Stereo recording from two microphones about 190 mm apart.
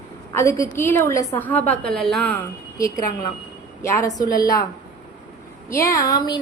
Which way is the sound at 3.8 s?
15° left (ahead or behind).